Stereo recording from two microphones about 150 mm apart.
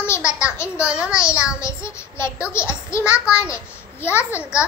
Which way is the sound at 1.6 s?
20° left (ahead or behind).